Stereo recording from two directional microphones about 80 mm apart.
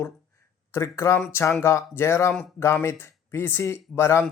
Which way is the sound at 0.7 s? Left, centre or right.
Left.